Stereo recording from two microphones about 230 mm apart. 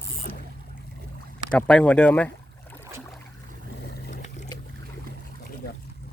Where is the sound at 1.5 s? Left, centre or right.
Centre.